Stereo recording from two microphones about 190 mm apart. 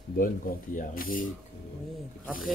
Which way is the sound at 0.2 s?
45° left (ahead or behind).